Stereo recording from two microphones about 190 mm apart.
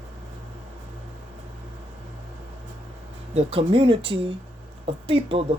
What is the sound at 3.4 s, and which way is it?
Speech, 30° right (ahead or behind).